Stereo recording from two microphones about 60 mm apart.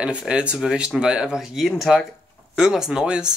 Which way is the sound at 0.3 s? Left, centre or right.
Centre.